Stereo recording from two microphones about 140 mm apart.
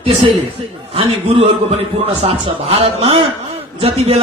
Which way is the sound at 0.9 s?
45° right (ahead or behind).